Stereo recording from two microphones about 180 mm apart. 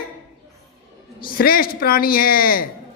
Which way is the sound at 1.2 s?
55° left (ahead or behind).